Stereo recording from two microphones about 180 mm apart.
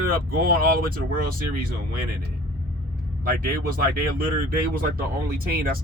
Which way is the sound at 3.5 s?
55° right (ahead or behind).